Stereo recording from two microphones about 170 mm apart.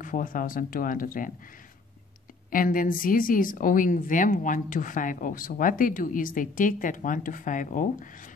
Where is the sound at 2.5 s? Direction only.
55° left (ahead or behind).